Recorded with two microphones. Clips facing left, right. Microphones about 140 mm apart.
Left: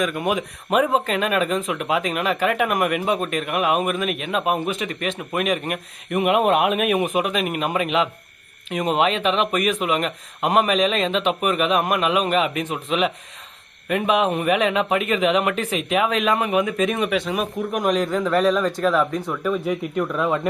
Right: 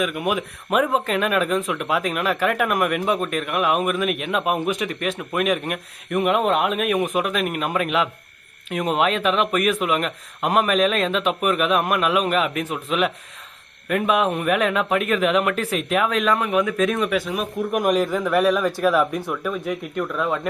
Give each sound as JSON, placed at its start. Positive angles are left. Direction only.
{"t": 0.8, "sound": "speech", "side_deg": 10}
{"t": 1.0, "sound": "speech", "side_deg": -5}